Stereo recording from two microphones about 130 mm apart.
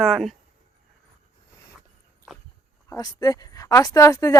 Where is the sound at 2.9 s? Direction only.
30° left (ahead or behind).